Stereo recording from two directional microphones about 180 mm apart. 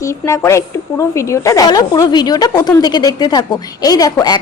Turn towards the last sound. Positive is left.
turn(degrees=20)  # may be behind; listen again after turning